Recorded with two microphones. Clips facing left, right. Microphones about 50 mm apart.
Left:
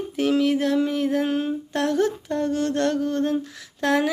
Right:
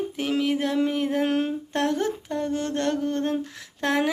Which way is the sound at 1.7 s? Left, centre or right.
Right.